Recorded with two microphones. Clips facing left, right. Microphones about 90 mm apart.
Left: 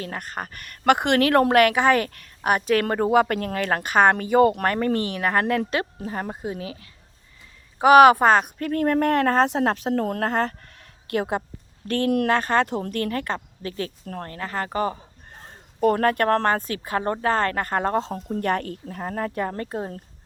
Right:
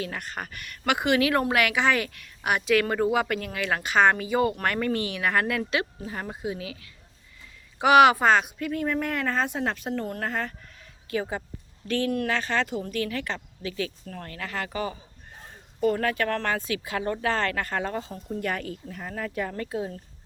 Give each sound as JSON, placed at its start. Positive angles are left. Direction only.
{"t": 0.0, "sound": "a woman's voice", "side_deg": 40}
{"t": 10.0, "sound": "speech", "side_deg": 75}
{"t": 11.9, "sound": "speech", "side_deg": 55}
{"t": 12.3, "sound": "a woman's voice", "side_deg": 50}
{"t": 17.9, "sound": "speech", "side_deg": 65}
{"t": 18.9, "sound": "a woman's voice", "side_deg": 40}